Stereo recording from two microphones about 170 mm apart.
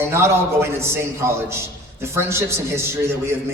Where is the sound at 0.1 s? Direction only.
15° right (ahead or behind).